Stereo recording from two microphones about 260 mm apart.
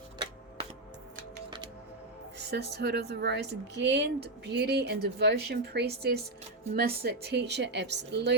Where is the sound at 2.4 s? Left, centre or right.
Right.